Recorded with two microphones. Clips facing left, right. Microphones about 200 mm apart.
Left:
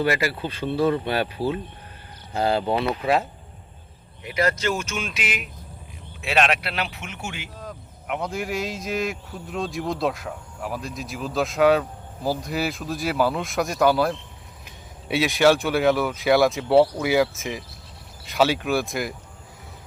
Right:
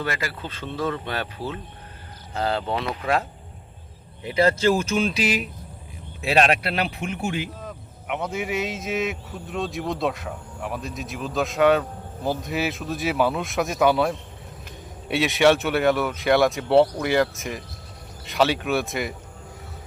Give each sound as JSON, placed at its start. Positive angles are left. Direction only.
{"t": 0.0, "sound": "speech", "side_deg": 10}
{"t": 4.2, "sound": "speech", "side_deg": -30}
{"t": 7.6, "sound": "speech", "side_deg": 0}